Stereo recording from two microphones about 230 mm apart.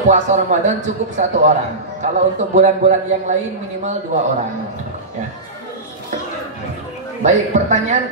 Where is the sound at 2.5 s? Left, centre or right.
Right.